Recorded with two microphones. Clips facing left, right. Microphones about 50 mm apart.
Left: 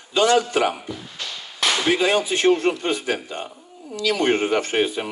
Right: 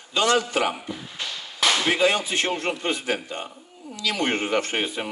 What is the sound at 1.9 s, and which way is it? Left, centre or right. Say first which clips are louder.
Speech: left 2 dB; centre.